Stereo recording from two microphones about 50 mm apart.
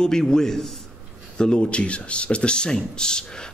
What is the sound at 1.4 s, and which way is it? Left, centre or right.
Speech, centre.